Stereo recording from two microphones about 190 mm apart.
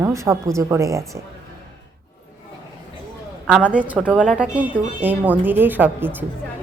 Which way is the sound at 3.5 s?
5° right (ahead or behind).